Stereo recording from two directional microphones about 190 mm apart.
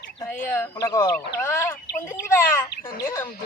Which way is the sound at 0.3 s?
15° left (ahead or behind).